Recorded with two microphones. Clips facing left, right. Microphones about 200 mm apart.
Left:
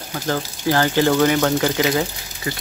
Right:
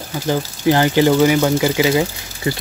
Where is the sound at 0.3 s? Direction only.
15° right (ahead or behind).